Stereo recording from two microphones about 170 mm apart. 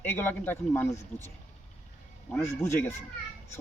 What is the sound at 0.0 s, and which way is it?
A man's voice, 15° left (ahead or behind).